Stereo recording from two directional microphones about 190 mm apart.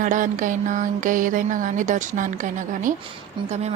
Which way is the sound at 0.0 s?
40° right (ahead or behind).